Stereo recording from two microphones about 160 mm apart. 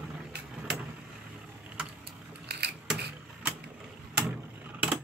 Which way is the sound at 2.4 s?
90° right.